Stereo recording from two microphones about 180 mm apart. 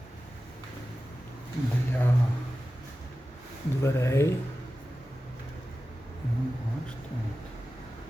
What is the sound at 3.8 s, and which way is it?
Speech, 15° left (ahead or behind).